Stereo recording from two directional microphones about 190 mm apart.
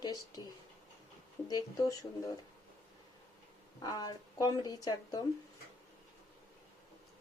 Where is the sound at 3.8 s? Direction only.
20° left (ahead or behind).